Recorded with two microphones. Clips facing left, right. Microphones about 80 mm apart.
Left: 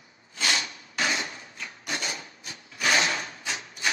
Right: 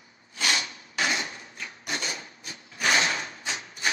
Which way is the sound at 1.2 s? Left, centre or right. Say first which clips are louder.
Even; right.